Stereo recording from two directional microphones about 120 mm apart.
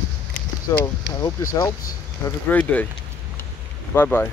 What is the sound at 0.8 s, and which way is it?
Speech, 30° left (ahead or behind).